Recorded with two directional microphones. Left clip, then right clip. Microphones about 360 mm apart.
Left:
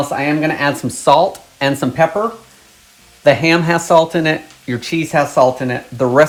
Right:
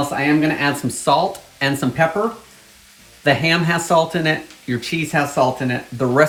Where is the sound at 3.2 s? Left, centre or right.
Centre.